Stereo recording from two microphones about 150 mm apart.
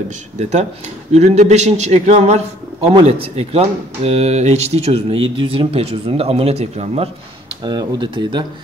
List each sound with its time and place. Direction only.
0.4 s a man's voice: 50° right (ahead or behind)
7.6 s speech: 30° right (ahead or behind)